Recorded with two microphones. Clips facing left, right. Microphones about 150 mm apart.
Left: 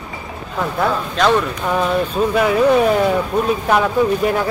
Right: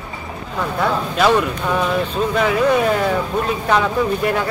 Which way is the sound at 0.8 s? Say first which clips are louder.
Even; 5° right (ahead or behind).